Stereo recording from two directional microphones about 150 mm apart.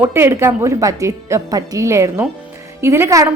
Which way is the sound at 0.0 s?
15° right (ahead or behind).